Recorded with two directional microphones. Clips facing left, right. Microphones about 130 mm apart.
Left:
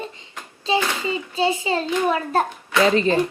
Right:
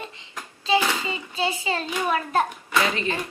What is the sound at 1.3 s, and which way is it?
A child's voice, 30° left (ahead or behind).